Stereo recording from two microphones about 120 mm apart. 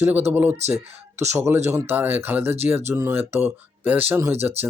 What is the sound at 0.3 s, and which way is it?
Speech, 15° right (ahead or behind).